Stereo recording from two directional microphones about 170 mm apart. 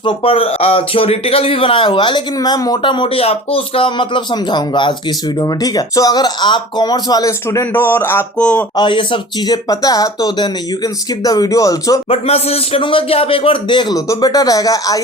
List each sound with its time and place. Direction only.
0.0 s speech: 35° left (ahead or behind); by 8.6 s 5° left (ahead or behind)
8.7 s speech: 30° left (ahead or behind)
12.0 s speech: 35° left (ahead or behind); by 15.0 s 20° left (ahead or behind)